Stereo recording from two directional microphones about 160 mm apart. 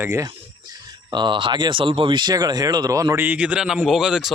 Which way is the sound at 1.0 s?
30° right (ahead or behind).